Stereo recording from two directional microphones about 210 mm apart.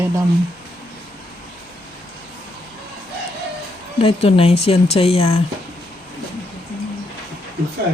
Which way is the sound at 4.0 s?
25° left (ahead or behind).